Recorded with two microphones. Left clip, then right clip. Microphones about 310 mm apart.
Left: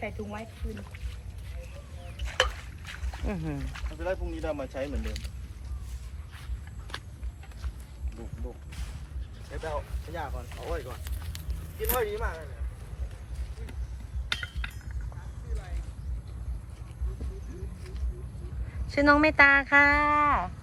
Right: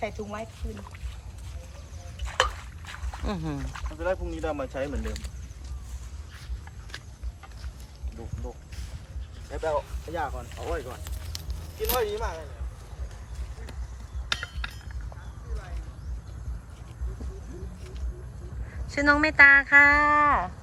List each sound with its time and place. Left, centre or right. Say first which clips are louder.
0.0 s speech: right 4 dB; centre
2.2 s a sound: right 2 dB; right
3.2 s speech: right 2 dB; centre
3.7 s speech: right 4 dB; right
10.2 s speech: right 5 dB; right
14.3 s a sound: right 2 dB; right
18.9 s speech: right 1 dB; centre